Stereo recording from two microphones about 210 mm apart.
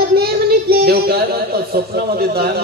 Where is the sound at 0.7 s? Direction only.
45° right (ahead or behind).